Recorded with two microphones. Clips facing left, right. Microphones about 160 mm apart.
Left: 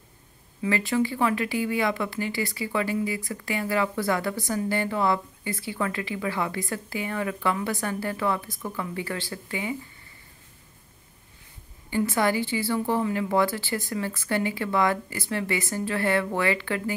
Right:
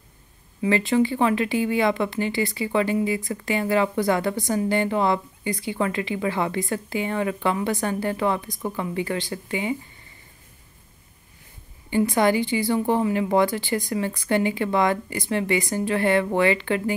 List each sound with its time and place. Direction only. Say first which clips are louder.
0.6 s speech: right 4 dB; 20° right (ahead or behind)
11.9 s speech: right 4 dB; 20° right (ahead or behind)